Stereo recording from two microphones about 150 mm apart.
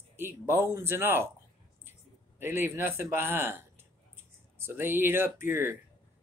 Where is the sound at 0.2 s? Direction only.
15° right (ahead or behind).